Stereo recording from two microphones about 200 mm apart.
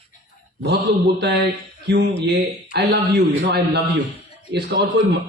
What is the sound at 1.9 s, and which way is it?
Speech, 60° right (ahead or behind).